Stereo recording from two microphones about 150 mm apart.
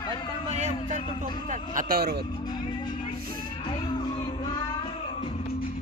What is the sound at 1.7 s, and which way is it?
Speech, 65° right (ahead or behind).